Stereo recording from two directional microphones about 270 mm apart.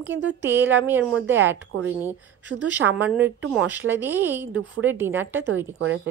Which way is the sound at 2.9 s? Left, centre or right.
Centre.